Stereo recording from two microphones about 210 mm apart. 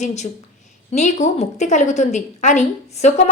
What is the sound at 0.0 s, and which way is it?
A woman's voice, 35° left (ahead or behind).